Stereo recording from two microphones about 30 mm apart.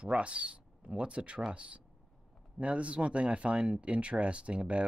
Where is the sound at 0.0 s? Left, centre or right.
Right.